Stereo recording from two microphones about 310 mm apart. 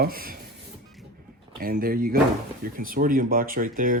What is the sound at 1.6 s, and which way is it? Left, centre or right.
Speech, right.